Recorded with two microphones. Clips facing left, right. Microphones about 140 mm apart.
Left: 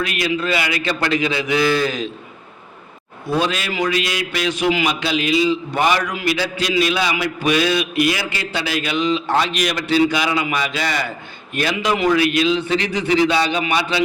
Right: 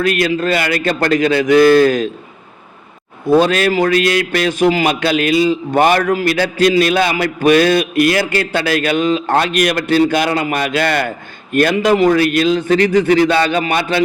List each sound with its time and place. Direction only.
0.0 s a man's voice: 45° right (ahead or behind)
3.2 s a man's voice: 50° right (ahead or behind)